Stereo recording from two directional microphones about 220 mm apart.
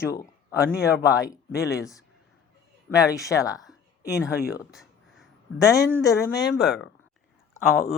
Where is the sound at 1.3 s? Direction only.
45° left (ahead or behind).